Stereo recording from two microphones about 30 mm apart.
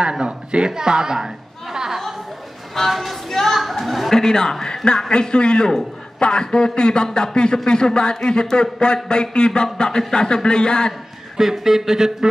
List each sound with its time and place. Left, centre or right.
0.0 s a woman's voice: right
2.9 s speech: centre
3.3 s speech: centre
4.1 s a man's voice: left
11.3 s speech: centre